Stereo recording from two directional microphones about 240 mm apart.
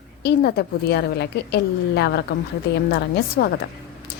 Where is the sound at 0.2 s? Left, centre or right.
Left.